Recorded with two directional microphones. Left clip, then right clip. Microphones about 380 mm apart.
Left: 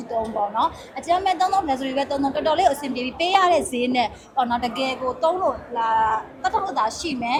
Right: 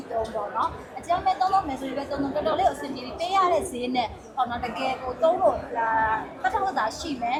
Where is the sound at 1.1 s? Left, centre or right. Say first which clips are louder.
Left 3 dB; left.